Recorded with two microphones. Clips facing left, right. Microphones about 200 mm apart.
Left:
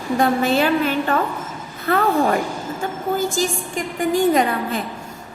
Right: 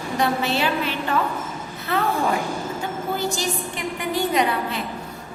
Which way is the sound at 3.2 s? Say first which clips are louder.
Left 4 dB; 50° left (ahead or behind).